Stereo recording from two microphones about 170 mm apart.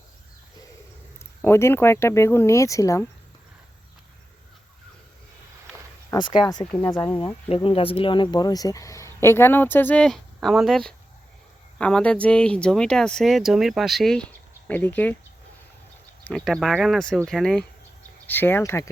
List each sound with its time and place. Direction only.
1.4 s speech: 15° left (ahead or behind)
6.1 s a sound: 25° left (ahead or behind)
6.4 s speech: 25° left (ahead or behind); by 15.1 s 10° left (ahead or behind)
16.2 s speech: 5° left (ahead or behind)